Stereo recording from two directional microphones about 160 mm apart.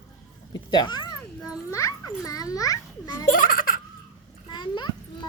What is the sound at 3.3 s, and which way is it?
Baby laughter, 60° left (ahead or behind).